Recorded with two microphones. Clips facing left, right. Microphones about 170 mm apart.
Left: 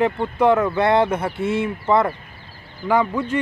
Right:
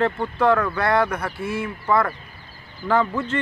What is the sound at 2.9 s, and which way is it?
Speech, 15° left (ahead or behind).